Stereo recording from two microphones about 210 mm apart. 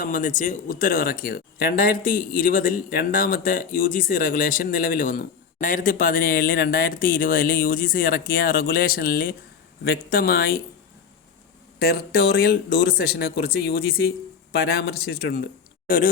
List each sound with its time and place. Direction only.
0.0 s speech: 40° left (ahead or behind)
11.8 s speech: 50° left (ahead or behind)